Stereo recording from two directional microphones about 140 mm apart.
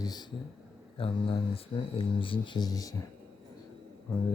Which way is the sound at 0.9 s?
40° left (ahead or behind).